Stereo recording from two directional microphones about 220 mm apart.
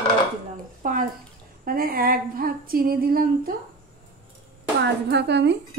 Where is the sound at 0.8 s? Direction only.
35° right (ahead or behind).